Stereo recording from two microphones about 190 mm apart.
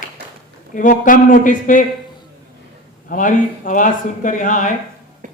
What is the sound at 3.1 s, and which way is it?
A man's voice, 45° left (ahead or behind).